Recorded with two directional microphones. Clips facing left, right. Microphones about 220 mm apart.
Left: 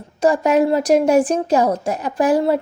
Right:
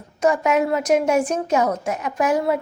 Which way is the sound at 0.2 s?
35° left (ahead or behind).